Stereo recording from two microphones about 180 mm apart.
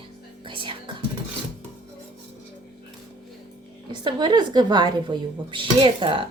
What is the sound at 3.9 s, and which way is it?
A woman's voice, 25° right (ahead or behind).